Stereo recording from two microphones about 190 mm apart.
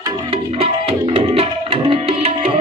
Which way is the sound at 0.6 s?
30° right (ahead or behind).